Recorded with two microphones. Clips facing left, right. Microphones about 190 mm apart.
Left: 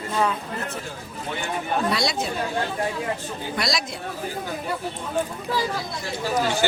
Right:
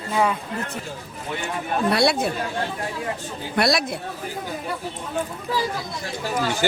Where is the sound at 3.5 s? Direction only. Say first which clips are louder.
Right 7 dB; 60° right (ahead or behind).